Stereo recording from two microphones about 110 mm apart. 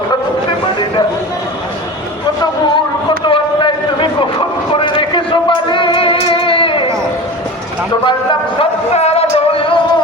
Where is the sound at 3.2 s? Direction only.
50° left (ahead or behind).